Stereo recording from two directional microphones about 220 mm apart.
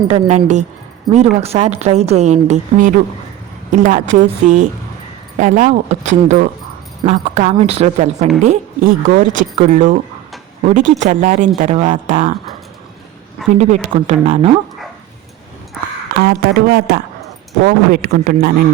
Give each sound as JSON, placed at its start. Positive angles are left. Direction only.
{"t": 0.1, "sound": "a woman's voice", "side_deg": -30}
{"t": 13.5, "sound": "a woman's voice", "side_deg": -30}
{"t": 16.1, "sound": "a man's voice", "side_deg": -45}